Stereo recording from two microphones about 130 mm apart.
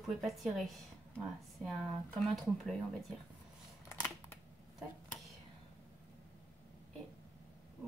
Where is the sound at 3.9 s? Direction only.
15° left (ahead or behind).